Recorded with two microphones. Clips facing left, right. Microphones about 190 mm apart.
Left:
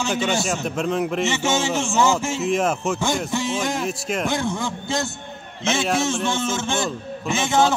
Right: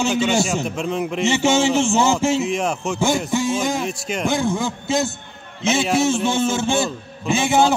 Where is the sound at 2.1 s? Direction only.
Centre (ahead or behind).